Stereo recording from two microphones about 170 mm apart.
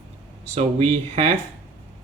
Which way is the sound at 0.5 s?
35° right (ahead or behind).